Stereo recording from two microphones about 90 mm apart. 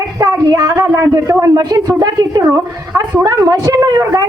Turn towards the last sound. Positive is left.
turn(degrees=-40)  # may be behind; listen again after turning